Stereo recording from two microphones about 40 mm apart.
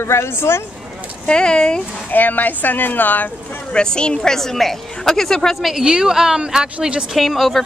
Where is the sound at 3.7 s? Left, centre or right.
Left.